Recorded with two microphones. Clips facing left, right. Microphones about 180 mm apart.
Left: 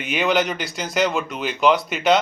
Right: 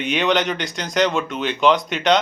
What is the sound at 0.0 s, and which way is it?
Speech, 5° left (ahead or behind).